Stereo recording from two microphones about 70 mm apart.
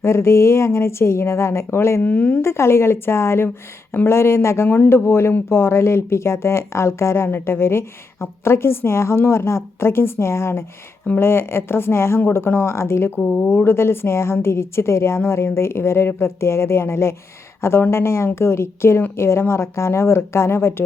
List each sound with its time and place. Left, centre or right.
0.0 s speech: left
2.0 s speech: left
2.4 s speech: left